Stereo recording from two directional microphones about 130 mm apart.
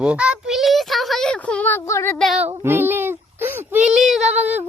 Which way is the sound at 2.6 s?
15° right (ahead or behind).